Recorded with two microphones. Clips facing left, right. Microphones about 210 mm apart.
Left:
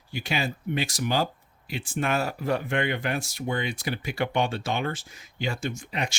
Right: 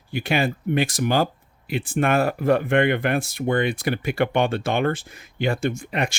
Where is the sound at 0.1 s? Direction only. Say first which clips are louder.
Right 7 dB; 55° right (ahead or behind).